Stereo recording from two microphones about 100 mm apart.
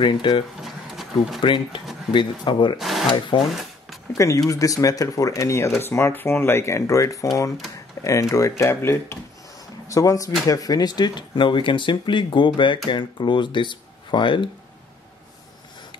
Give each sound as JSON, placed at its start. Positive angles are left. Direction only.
{"t": 0.0, "sound": "speech", "side_deg": 55}
{"t": 0.6, "sound": "a sound", "side_deg": 0}
{"t": 1.4, "sound": "speech", "side_deg": 55}
{"t": 2.8, "sound": "speech", "side_deg": 0}
{"t": 3.3, "sound": "speech", "side_deg": 55}
{"t": 4.1, "sound": "speech", "side_deg": 30}